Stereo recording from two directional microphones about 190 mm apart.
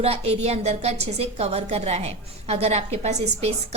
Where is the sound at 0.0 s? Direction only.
30° right (ahead or behind).